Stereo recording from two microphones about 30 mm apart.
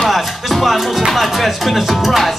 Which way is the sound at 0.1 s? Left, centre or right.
Centre.